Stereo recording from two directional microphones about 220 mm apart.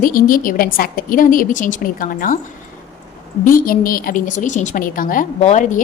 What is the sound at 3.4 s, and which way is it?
A woman's voice, 40° left (ahead or behind).